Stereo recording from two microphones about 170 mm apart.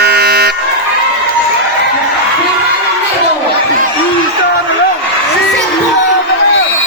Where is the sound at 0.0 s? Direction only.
70° right (ahead or behind).